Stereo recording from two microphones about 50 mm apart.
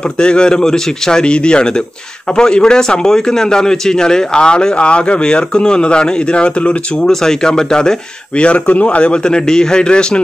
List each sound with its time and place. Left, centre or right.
0.2 s a man's voice: centre
7.1 s a man's voice: centre
8.4 s a man's voice: left